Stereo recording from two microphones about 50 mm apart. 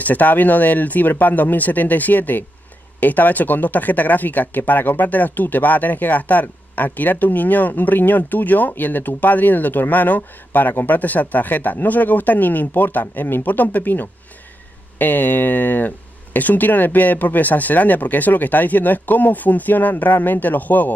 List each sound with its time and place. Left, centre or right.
0.0 s speech: left